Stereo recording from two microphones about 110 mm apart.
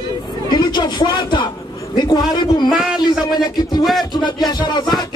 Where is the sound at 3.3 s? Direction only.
40° left (ahead or behind).